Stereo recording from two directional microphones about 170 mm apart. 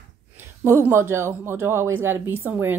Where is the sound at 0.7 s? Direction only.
15° right (ahead or behind).